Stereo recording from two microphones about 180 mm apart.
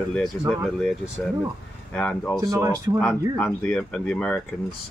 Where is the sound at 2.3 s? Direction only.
20° right (ahead or behind).